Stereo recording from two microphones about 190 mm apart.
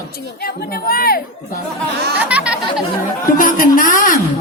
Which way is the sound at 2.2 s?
5° right (ahead or behind).